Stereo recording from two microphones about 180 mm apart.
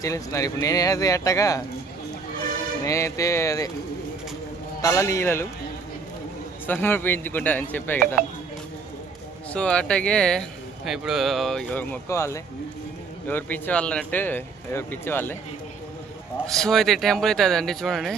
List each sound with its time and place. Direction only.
0.0 s speech: 20° left (ahead or behind)
2.8 s speech: 15° left (ahead or behind)
4.8 s speech: 15° left (ahead or behind)
6.7 s speech: 10° left (ahead or behind)
9.5 s speech: 5° left (ahead or behind)
16.5 s speech: centre (ahead or behind)